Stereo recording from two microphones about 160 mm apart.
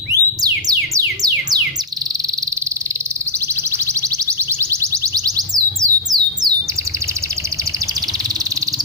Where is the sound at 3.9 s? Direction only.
20° right (ahead or behind).